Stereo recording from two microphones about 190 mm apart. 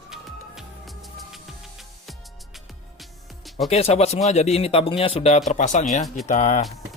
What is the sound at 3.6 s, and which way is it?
Speech, 35° left (ahead or behind).